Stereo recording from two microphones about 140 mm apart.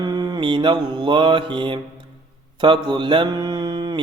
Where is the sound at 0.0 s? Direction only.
30° right (ahead or behind).